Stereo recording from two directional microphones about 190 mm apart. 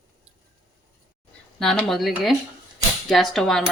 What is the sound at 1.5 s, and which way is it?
Speech, centre (ahead or behind).